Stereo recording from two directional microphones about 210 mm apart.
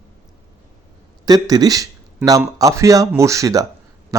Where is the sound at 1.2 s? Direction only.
20° right (ahead or behind).